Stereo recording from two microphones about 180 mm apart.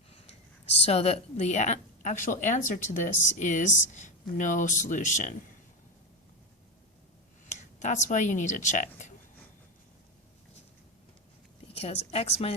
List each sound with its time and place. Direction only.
0.9 s a woman's voice: 35° left (ahead or behind)
7.4 s speech: 40° left (ahead or behind)
11.7 s a sound: 35° left (ahead or behind)
12.1 s speech: 35° left (ahead or behind)